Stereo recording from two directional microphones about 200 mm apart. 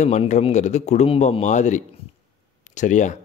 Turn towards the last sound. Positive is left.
turn(degrees=40)  # may be behind; listen again after turning